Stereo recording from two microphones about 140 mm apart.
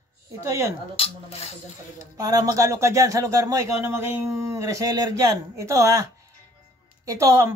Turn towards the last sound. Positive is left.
turn(degrees=-20)  # may be behind; listen again after turning